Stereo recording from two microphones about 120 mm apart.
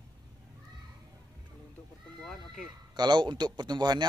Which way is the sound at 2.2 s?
Centre (ahead or behind).